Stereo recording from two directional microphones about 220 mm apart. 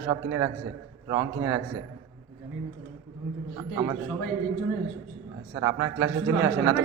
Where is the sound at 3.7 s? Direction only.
20° right (ahead or behind).